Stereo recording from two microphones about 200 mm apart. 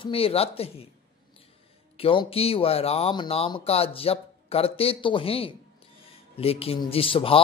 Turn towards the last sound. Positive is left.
turn(degrees=25)  # may be behind; listen again after turning